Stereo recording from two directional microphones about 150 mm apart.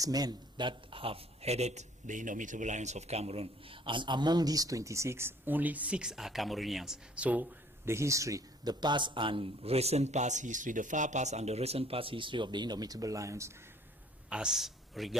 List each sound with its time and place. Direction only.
0.0 s a man's voice: 25° right (ahead or behind)
14.3 s a man's voice: 5° right (ahead or behind)